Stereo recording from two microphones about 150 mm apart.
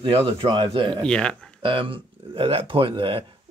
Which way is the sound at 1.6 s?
35° right (ahead or behind).